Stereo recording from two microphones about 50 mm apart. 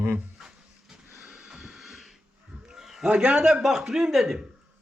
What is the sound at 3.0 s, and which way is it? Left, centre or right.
Speech, right.